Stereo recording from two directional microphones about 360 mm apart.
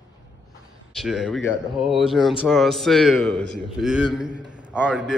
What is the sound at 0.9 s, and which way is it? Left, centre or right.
Speech, centre.